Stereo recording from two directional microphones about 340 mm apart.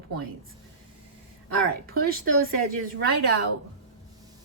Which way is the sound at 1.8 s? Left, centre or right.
Right.